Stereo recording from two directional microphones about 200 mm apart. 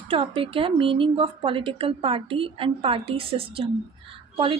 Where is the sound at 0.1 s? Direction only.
25° right (ahead or behind).